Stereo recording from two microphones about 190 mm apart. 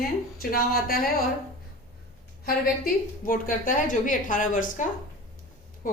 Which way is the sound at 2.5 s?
50° left (ahead or behind).